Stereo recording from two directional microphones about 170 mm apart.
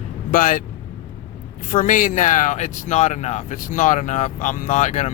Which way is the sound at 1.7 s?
50° left (ahead or behind).